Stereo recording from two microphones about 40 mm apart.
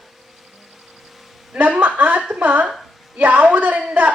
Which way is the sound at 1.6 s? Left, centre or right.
Right.